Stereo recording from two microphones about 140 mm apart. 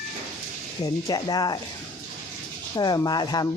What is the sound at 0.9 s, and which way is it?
Speech, 30° left (ahead or behind).